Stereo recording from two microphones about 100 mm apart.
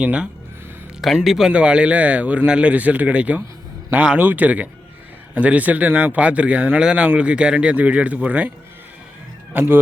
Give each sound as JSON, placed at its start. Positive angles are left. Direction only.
{"t": 0.0, "sound": "speech", "side_deg": -15}
{"t": 1.0, "sound": "speech", "side_deg": 0}